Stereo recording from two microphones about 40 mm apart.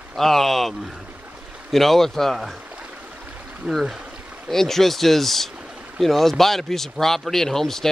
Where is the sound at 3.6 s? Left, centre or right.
Right.